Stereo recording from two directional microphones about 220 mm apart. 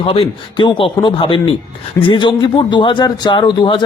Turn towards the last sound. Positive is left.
turn(degrees=20)  # may be behind; listen again after turning